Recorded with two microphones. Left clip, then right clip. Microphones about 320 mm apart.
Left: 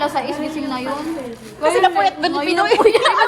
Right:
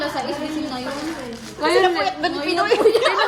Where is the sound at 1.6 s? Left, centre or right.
Right.